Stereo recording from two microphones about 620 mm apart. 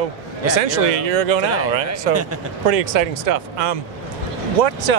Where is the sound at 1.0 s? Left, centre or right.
Right.